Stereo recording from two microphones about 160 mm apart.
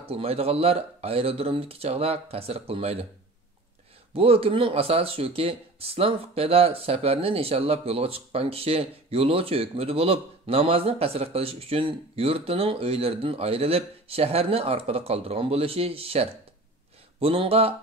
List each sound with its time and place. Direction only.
0.0 s speech: 40° right (ahead or behind)
4.1 s speech: 35° right (ahead or behind)